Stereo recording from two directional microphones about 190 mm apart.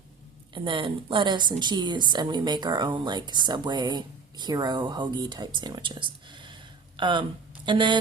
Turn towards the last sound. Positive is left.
turn(degrees=-25)  # may be behind; listen again after turning